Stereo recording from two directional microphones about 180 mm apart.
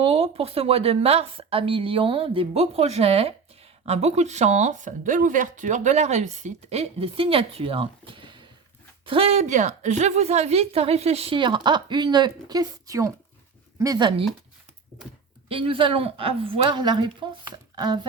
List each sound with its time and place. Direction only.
0.0 s a woman's voice: 30° right (ahead or behind)
15.4 s a woman's voice: 30° right (ahead or behind)